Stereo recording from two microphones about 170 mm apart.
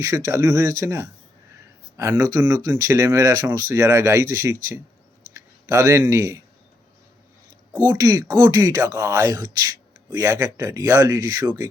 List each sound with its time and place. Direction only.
0.0 s speech: 15° right (ahead or behind)
5.6 s speech: 15° right (ahead or behind)
7.9 s speech: 20° right (ahead or behind)